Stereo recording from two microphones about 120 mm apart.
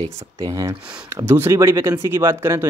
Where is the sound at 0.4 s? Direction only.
25° right (ahead or behind).